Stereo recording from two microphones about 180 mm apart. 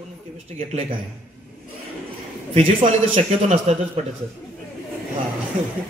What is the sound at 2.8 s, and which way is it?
A woman's voice, 35° right (ahead or behind).